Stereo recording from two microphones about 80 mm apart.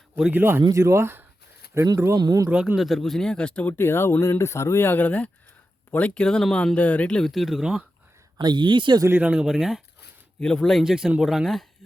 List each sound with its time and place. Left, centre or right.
0.3 s speech: right
0.7 s speech: right
2.1 s speech: right
2.5 s speech: centre
2.7 s speech: centre
8.4 s speech: right
9.2 s speech: centre
10.4 s speech: centre